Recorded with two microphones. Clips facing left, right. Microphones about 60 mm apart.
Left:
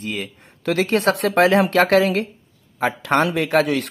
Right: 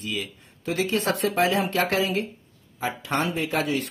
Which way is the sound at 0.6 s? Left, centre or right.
Left.